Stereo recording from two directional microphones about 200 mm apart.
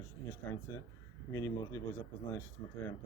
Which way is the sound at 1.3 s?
15° left (ahead or behind).